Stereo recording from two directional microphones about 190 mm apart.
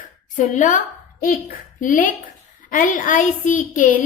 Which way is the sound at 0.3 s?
40° left (ahead or behind).